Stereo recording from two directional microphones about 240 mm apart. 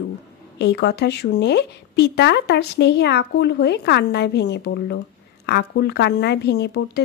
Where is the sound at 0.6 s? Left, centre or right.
Left.